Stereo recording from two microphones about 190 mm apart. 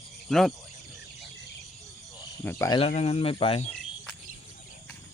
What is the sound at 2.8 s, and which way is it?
Speech, 35° left (ahead or behind).